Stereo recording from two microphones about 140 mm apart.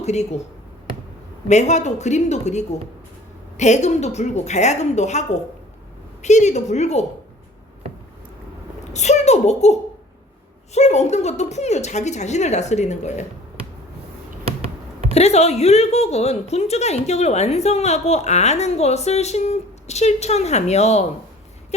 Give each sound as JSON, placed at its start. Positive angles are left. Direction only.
{"t": 0.0, "sound": "a woman's voice", "side_deg": 50}
{"t": 1.5, "sound": "a woman's voice", "side_deg": 55}
{"t": 8.9, "sound": "a woman's voice", "side_deg": 55}
{"t": 10.8, "sound": "a woman's voice", "side_deg": 50}
{"t": 15.1, "sound": "a woman's voice", "side_deg": 50}